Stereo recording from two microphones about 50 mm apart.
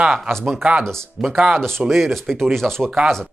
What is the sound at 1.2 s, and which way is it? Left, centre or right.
Speech, centre.